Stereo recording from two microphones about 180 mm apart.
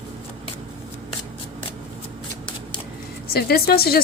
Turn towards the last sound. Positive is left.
turn(degrees=60)  # may be behind; listen again after turning